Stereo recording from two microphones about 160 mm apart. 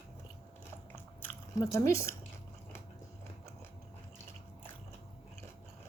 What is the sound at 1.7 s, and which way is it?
Speech, 20° left (ahead or behind).